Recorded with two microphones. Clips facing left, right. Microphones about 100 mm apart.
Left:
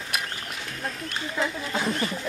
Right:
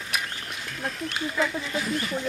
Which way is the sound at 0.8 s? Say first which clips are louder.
Right 3 dB; 5° right (ahead or behind).